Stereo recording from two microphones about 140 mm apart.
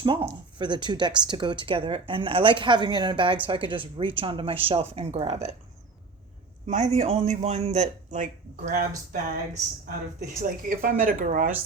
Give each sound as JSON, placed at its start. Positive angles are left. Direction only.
{"t": 0.0, "sound": "speech", "side_deg": -35}
{"t": 5.3, "sound": "speech", "side_deg": -50}
{"t": 6.7, "sound": "a man's voice", "side_deg": -55}
{"t": 10.4, "sound": "speech", "side_deg": -80}